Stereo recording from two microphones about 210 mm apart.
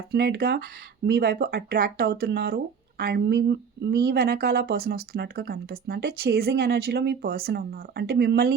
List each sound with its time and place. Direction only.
0.1 s speech: 50° right (ahead or behind)